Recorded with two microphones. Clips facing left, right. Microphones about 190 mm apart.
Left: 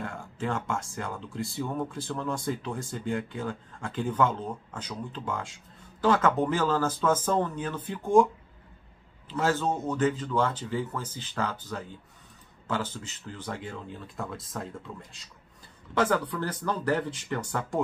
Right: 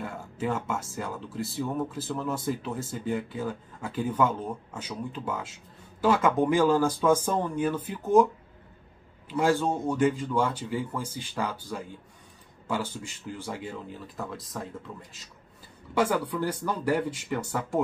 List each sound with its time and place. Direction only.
0.0 s speech: 5° right (ahead or behind)
9.3 s speech: 10° right (ahead or behind)